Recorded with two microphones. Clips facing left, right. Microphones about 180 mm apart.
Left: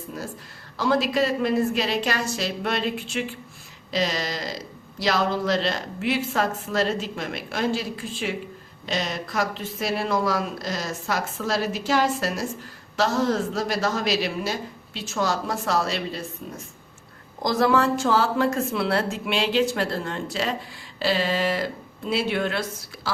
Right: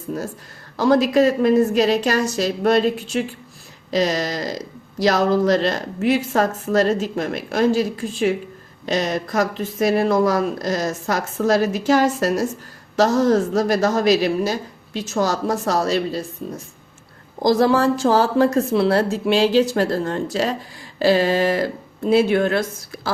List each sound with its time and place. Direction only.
0.8 s a woman's voice: 45° right (ahead or behind)
17.4 s a woman's voice: 35° right (ahead or behind)